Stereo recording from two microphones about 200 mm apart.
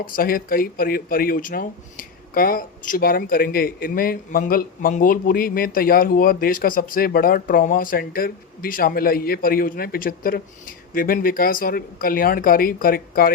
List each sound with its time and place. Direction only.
0.0 s speech: 45° left (ahead or behind)